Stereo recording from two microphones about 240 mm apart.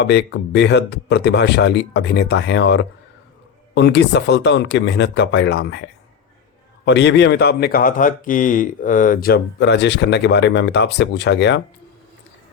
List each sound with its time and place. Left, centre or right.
0.0 s a man's voice: left
6.8 s a man's voice: left